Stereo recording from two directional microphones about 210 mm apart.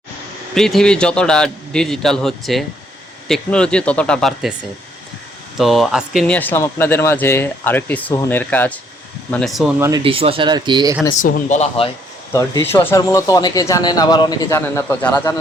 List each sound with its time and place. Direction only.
0.5 s a man's voice: centre (ahead or behind)
5.5 s a man's voice: centre (ahead or behind)
10.0 s speech: 25° right (ahead or behind)
11.2 s speech: 35° left (ahead or behind)
12.3 s speech: 15° left (ahead or behind)